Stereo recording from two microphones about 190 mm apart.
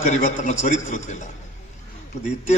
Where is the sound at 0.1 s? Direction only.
40° left (ahead or behind).